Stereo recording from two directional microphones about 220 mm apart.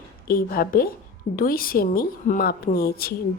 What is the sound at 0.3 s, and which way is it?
A woman's voice, 40° left (ahead or behind).